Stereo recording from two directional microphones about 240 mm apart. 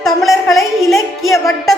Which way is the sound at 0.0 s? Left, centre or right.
Centre.